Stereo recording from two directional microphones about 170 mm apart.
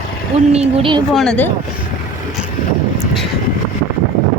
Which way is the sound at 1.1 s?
Centre (ahead or behind).